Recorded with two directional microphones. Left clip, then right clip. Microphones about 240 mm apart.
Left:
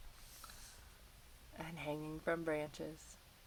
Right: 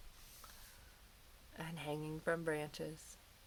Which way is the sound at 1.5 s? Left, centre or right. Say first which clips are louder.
Even; right.